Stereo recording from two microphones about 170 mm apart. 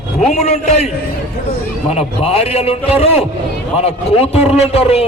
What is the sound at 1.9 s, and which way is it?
A man's voice, 35° left (ahead or behind).